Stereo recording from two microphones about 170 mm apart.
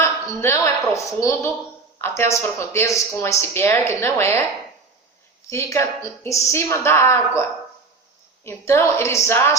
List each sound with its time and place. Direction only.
0.0 s a woman's voice: 15° left (ahead or behind)
5.5 s speech: 15° left (ahead or behind)
8.4 s speech: 15° left (ahead or behind)